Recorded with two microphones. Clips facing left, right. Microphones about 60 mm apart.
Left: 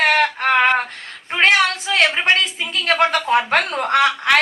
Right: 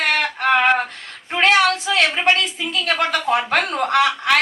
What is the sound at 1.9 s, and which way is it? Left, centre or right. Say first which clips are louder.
A woman's voice: left 4 dB; left.